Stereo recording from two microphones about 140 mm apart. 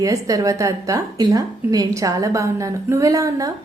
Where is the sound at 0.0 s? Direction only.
25° right (ahead or behind).